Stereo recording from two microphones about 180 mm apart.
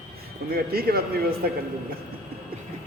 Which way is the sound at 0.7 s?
60° right (ahead or behind).